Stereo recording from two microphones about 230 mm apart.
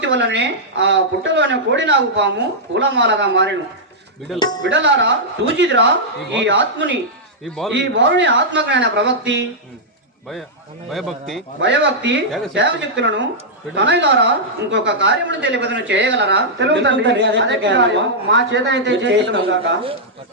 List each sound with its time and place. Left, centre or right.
0.0 s speech: right
4.4 s speech: centre
4.6 s speech: right
10.9 s speech: centre
11.6 s speech: right